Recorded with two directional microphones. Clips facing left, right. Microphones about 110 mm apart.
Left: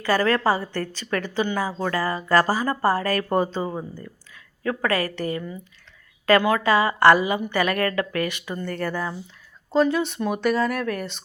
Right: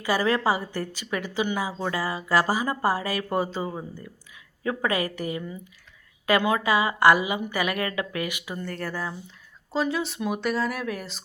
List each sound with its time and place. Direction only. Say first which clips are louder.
0.0 s a woman's voice: left 3 dB; 10° right (ahead or behind)
4.6 s a woman's voice: left 2 dB; 15° right (ahead or behind); by 11.2 s centre (ahead or behind)